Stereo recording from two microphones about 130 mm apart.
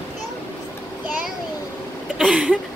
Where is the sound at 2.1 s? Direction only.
5° right (ahead or behind).